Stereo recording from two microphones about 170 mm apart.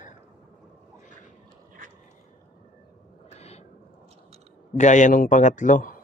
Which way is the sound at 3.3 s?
40° left (ahead or behind).